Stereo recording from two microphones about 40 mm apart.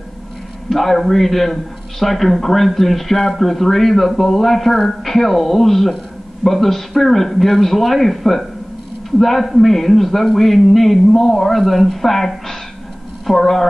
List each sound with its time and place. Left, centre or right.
0.7 s a man's voice: centre